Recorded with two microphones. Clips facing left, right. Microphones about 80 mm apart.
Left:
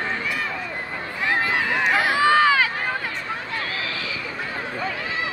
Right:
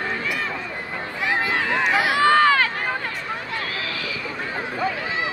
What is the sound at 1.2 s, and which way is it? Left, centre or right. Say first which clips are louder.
Run: left 1 dB; centre.